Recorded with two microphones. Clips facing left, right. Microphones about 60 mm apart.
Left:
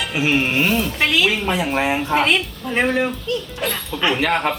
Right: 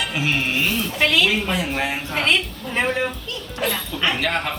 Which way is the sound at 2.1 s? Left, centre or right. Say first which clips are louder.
Left 1 dB; centre.